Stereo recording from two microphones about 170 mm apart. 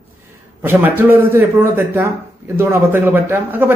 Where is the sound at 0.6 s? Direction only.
10° right (ahead or behind).